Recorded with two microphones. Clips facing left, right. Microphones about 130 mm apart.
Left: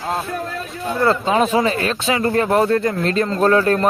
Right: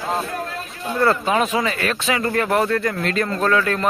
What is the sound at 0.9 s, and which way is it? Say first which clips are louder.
Speech: left 2 dB; 25° left (ahead or behind).